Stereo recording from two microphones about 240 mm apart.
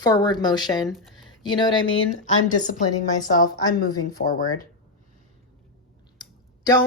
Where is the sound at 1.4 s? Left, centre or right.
Centre.